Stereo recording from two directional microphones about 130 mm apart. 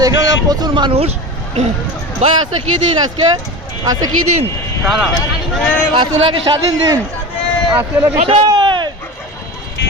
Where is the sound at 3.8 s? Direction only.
30° right (ahead or behind).